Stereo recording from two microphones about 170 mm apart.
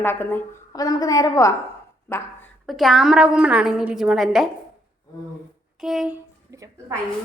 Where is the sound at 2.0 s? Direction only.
15° left (ahead or behind).